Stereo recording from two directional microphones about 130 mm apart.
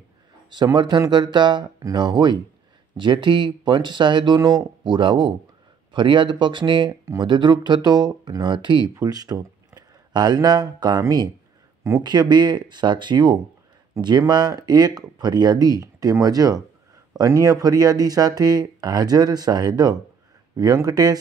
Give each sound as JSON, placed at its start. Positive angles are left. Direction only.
{"t": 0.7, "sound": "speech", "side_deg": -30}